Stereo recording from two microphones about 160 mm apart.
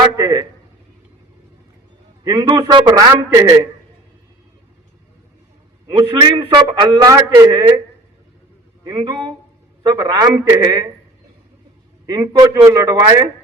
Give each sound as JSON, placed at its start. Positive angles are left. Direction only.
{"t": 0.0, "sound": "a sound", "side_deg": -25}
{"t": 2.2, "sound": "a man's voice", "side_deg": -25}
{"t": 5.9, "sound": "a man's voice", "side_deg": -25}
{"t": 8.8, "sound": "a man's voice", "side_deg": -30}
{"t": 12.0, "sound": "a man's voice", "side_deg": -25}